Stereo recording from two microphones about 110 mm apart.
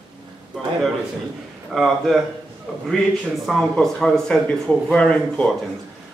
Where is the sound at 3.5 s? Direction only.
5° left (ahead or behind).